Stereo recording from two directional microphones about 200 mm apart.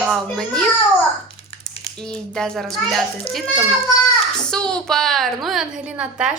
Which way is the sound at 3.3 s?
30° left (ahead or behind).